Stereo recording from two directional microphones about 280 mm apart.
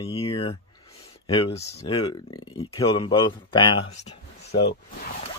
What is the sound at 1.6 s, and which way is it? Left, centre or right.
Speech, centre.